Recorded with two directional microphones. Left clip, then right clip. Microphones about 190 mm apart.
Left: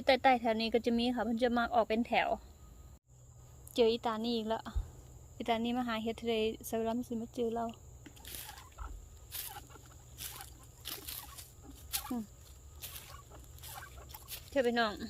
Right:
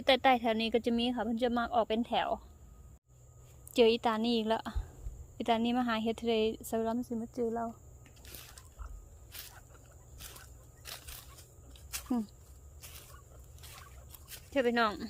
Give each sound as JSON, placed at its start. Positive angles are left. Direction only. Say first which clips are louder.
{"t": 0.0, "sound": "speech", "louder": "right 1 dB", "side_deg": -15}
{"t": 3.7, "sound": "a woman's voice", "louder": "right 4 dB", "side_deg": -25}
{"t": 10.2, "sound": "a sound", "louder": "left 3 dB", "side_deg": 10}
{"t": 14.5, "sound": "speech", "louder": "right 2 dB", "side_deg": -15}